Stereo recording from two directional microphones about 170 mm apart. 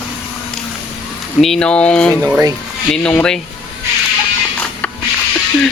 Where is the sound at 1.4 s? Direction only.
5° left (ahead or behind).